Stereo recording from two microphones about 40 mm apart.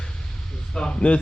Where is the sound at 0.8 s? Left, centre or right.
Left.